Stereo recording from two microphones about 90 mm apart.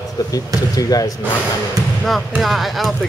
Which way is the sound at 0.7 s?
45° left (ahead or behind).